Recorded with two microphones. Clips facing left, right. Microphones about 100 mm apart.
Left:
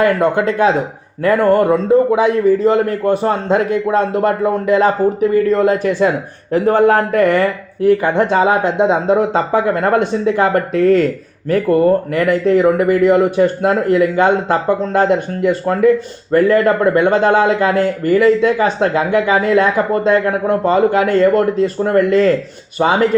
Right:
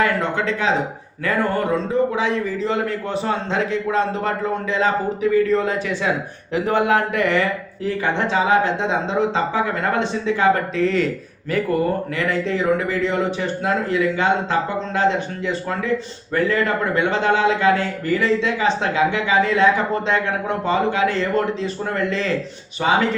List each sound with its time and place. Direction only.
0.0 s speech: 50° left (ahead or behind)
1.9 s speech: 55° left (ahead or behind)
22.8 s speech: 30° left (ahead or behind)